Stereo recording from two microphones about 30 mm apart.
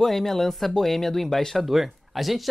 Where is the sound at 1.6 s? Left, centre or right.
Centre.